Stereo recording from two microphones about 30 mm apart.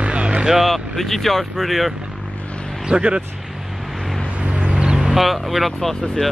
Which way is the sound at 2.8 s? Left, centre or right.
Right.